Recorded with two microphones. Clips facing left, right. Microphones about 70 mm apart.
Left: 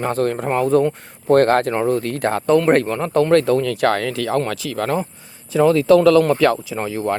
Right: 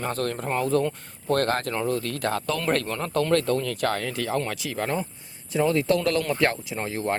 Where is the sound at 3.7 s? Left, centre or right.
Left.